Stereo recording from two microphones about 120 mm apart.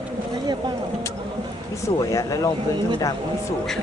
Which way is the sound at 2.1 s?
30° left (ahead or behind).